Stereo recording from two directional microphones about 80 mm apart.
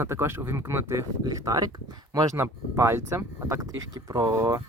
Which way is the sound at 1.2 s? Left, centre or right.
Right.